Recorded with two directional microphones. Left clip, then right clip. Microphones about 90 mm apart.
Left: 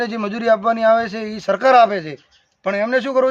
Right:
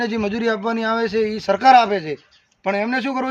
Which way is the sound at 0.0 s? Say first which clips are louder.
Left 1 dB; 40° left (ahead or behind).